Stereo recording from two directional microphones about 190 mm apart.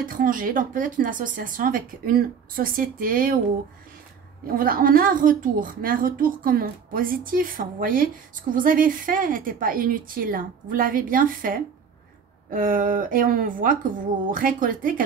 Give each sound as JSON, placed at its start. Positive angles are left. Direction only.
{"t": 0.0, "sound": "a woman's voice", "side_deg": -50}
{"t": 4.6, "sound": "a woman's voice", "side_deg": -50}